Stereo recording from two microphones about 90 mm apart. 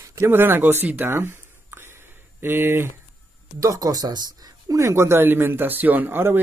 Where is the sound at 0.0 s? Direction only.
30° right (ahead or behind).